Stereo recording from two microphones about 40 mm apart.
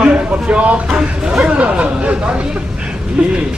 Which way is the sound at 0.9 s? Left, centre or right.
Centre.